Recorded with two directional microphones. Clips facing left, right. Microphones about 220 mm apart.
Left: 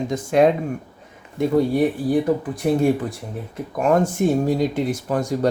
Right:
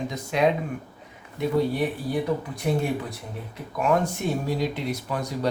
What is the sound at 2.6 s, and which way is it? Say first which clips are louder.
Speech: left 7 dB; 50° left (ahead or behind).